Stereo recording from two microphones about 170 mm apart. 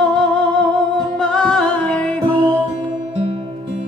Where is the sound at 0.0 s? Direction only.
5° left (ahead or behind).